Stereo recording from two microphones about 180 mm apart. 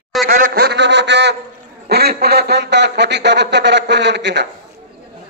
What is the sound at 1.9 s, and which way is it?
Speech, 60° right (ahead or behind).